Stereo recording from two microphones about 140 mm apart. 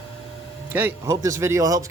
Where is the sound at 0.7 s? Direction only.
20° right (ahead or behind).